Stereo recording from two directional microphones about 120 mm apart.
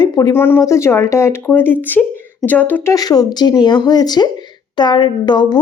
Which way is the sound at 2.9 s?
30° left (ahead or behind).